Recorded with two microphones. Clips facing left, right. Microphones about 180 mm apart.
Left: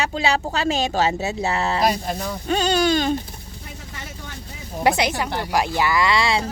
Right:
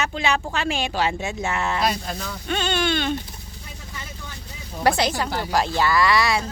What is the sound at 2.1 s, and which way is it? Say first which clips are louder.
Speech: left 5 dB; 15° left (ahead or behind).